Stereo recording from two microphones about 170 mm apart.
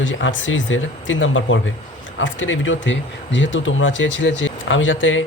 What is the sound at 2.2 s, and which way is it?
Speech, 90° left.